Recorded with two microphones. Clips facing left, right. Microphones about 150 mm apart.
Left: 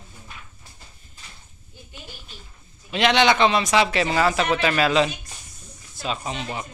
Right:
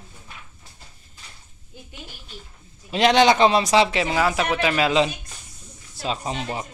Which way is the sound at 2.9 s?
40° right (ahead or behind).